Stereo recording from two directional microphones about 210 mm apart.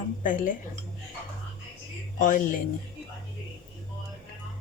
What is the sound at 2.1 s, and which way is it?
Speech, 35° left (ahead or behind).